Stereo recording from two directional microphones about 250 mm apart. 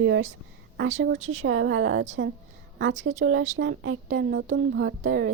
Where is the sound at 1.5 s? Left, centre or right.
Right.